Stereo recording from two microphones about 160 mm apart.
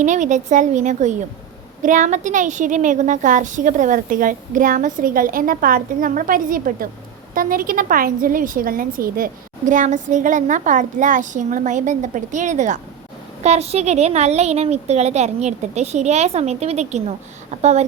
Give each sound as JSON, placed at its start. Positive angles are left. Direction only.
{"t": 0.0, "sound": "a woman's voice", "side_deg": -50}